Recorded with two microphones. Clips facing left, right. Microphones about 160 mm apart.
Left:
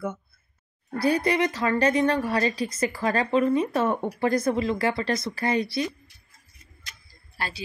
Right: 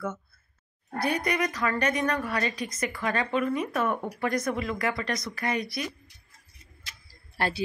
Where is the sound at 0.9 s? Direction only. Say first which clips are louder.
Left 5 dB; 35° left (ahead or behind).